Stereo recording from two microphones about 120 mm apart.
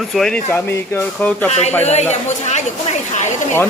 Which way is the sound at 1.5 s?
65° left (ahead or behind).